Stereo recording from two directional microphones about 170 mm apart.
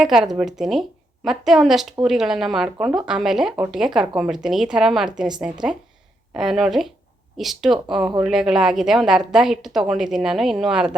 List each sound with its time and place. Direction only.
0.0 s a woman's voice: centre (ahead or behind)